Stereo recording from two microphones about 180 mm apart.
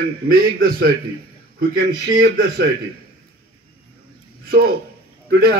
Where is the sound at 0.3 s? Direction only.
55° right (ahead or behind).